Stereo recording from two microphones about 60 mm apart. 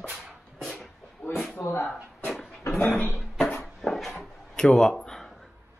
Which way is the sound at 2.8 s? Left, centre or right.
Left.